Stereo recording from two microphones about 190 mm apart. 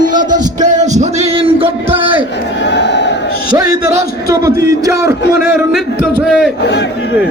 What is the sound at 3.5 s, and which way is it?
A man's voice, 15° right (ahead or behind).